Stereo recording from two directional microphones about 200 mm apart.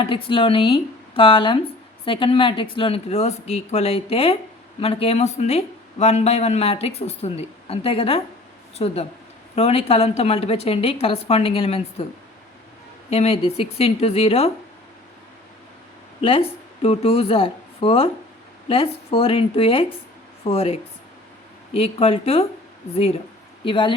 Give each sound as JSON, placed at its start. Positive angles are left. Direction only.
{"t": 0.0, "sound": "a woman's voice", "side_deg": 25}
{"t": 13.1, "sound": "a woman's voice", "side_deg": 30}
{"t": 16.2, "sound": "a woman's voice", "side_deg": 30}
{"t": 23.6, "sound": "a woman's voice", "side_deg": 25}